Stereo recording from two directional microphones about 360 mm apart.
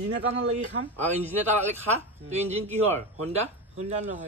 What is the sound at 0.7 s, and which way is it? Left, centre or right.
Speech, right.